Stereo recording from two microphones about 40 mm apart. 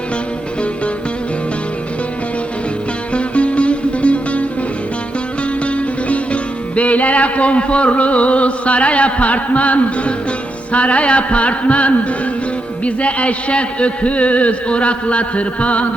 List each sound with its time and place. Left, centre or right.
3.1 s music: left
5.6 s music: left
10.7 s a man's voice: left